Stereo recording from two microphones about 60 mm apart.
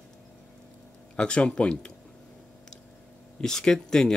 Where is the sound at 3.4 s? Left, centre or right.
Centre.